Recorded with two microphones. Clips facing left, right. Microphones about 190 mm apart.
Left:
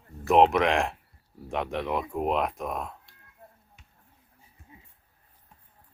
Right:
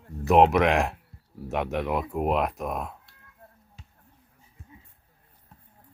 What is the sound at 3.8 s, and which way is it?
Finger snapping, 35° right (ahead or behind).